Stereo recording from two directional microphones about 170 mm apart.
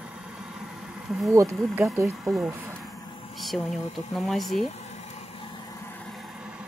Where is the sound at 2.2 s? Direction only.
Centre (ahead or behind).